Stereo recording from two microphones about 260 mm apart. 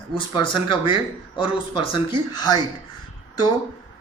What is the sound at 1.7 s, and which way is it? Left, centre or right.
Speech, centre.